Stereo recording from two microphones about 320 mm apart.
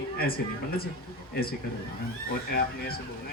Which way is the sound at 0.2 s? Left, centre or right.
Left.